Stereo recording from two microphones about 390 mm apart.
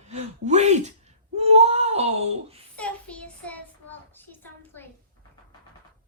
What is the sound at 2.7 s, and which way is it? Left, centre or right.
Child singing, centre.